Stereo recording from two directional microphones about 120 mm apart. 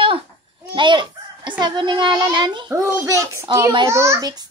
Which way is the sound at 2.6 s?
20° right (ahead or behind).